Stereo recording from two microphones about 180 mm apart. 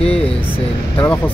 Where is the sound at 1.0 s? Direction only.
10° left (ahead or behind).